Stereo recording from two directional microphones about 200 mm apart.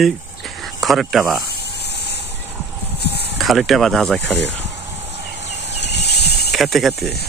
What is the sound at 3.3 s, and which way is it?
Speech, centre (ahead or behind).